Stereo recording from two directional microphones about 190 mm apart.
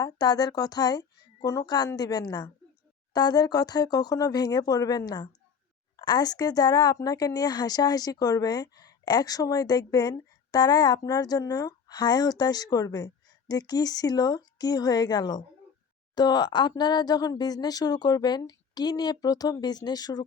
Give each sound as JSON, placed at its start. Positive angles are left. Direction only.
{"t": 0.0, "sound": "speech", "side_deg": 20}